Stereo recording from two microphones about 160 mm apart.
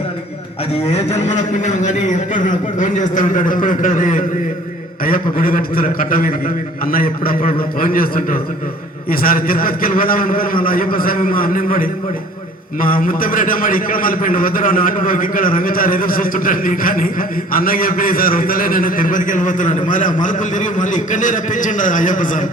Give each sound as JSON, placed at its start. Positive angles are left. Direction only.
{"t": 1.6, "sound": "a man's voice", "side_deg": 50}